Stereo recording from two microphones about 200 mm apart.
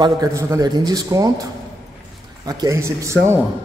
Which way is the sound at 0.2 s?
15° right (ahead or behind).